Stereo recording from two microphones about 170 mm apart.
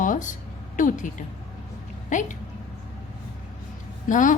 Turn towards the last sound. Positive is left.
turn(degrees=50)  # may be behind; listen again after turning